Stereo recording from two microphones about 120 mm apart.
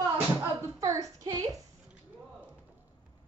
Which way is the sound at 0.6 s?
30° right (ahead or behind).